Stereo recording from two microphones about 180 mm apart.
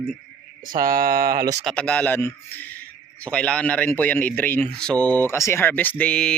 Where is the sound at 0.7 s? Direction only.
50° right (ahead or behind).